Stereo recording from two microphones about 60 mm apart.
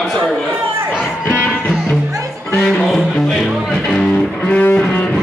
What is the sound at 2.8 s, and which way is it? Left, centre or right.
Music, centre.